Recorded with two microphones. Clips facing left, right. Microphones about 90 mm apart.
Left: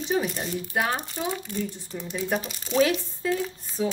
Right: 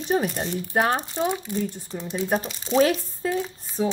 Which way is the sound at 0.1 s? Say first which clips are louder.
Right 3 dB; 35° right (ahead or behind).